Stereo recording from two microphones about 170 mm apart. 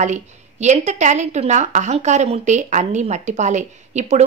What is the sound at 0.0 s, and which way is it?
A woman's voice, 45° right (ahead or behind).